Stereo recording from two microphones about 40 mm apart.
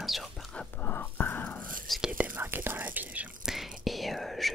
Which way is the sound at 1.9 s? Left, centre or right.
Centre.